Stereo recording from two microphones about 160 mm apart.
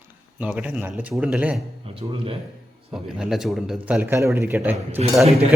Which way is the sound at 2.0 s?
35° right (ahead or behind).